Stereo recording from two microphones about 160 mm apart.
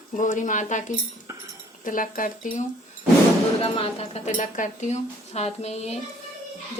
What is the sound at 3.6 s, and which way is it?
Speech, 35° left (ahead or behind).